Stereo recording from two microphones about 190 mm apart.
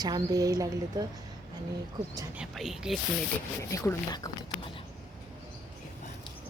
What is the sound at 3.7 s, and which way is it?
Speech, 15° left (ahead or behind).